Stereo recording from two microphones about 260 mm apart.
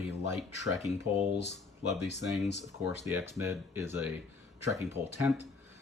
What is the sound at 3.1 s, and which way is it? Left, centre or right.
Speech, centre.